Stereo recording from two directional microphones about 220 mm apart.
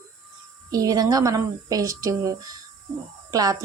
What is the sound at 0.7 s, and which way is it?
Speech, 15° right (ahead or behind).